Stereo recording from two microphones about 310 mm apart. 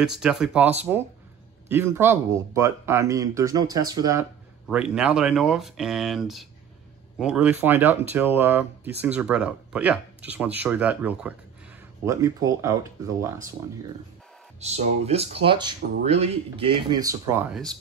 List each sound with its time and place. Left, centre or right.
0.0 s speech: centre
14.6 s speech: right; by 17.7 s centre